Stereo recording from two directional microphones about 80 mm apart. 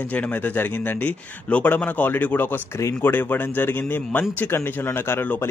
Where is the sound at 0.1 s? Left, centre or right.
Left.